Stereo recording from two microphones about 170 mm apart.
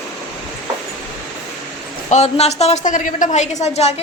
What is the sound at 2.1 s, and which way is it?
A woman's voice, 40° left (ahead or behind).